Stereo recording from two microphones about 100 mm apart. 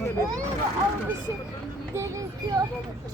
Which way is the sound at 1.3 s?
25° right (ahead or behind).